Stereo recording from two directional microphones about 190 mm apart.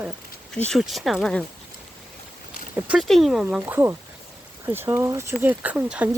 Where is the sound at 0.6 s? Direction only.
Centre (ahead or behind).